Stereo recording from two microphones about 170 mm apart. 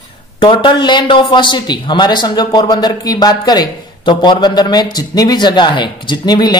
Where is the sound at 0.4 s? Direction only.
30° left (ahead or behind).